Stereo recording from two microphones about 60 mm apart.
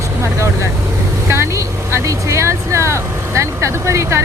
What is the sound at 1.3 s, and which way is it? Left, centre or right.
Speech, right.